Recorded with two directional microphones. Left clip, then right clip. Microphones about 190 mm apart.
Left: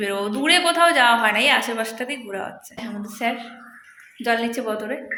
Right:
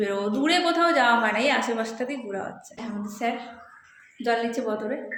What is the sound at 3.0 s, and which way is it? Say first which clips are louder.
A woman's voice: left 3 dB; 25° left (ahead or behind).